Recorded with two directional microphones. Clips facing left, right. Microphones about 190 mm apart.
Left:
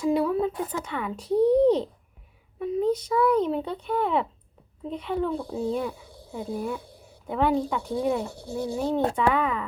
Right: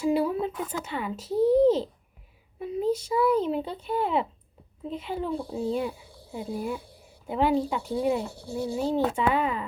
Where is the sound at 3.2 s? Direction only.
30° right (ahead or behind).